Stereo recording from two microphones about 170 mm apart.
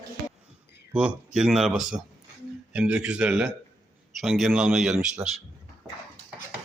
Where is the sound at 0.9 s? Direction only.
5° right (ahead or behind).